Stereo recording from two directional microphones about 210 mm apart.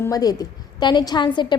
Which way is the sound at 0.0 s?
15° left (ahead or behind).